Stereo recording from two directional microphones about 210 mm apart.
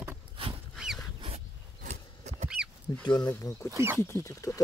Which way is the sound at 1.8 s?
35° right (ahead or behind).